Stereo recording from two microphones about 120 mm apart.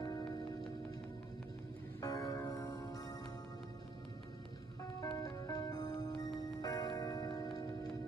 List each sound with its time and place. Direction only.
2.0 s music: 30° left (ahead or behind)
5.0 s music: 30° left (ahead or behind)